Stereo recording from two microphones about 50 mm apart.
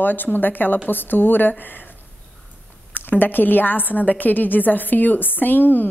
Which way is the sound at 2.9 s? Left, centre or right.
Left.